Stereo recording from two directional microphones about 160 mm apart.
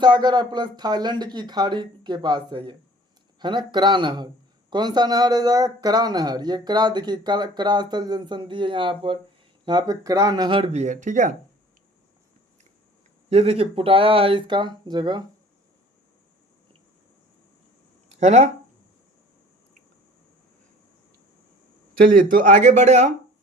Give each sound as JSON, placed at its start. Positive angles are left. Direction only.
{"t": 0.0, "sound": "speech", "side_deg": -25}
{"t": 13.3, "sound": "speech", "side_deg": -40}
{"t": 18.2, "sound": "speech", "side_deg": -45}
{"t": 21.9, "sound": "speech", "side_deg": -60}